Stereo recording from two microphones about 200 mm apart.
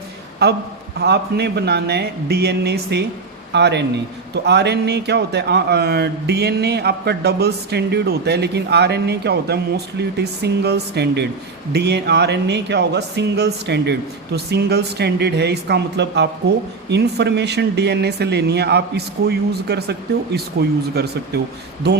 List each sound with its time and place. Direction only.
0.4 s a man's voice: 55° right (ahead or behind)